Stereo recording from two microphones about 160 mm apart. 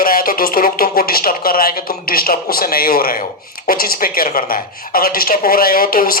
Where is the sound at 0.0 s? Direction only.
60° left (ahead or behind).